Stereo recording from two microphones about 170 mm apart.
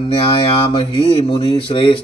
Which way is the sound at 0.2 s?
30° left (ahead or behind).